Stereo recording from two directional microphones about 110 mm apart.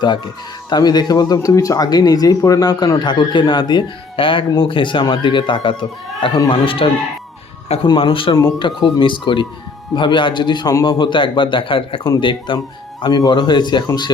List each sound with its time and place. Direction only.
0.7 s speech: 40° left (ahead or behind)
6.5 s a man's voice: 55° left (ahead or behind)
7.9 s a man's voice: 50° left (ahead or behind)